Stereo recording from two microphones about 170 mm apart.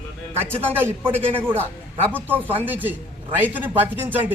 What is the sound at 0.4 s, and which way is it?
Speech, 15° right (ahead or behind).